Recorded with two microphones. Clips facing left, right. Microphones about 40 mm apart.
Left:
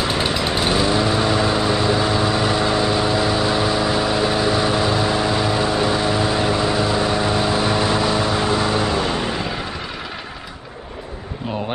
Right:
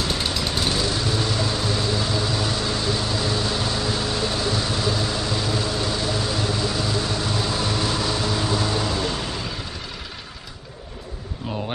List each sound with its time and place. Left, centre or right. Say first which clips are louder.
0.0 s vehicle: left 5 dB; left